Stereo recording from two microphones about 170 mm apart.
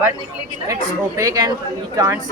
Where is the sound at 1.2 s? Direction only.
20° right (ahead or behind).